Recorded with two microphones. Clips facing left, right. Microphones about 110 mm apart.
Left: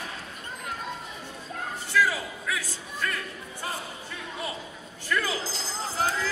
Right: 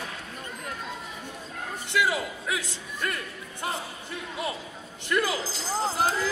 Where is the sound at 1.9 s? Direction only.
20° right (ahead or behind).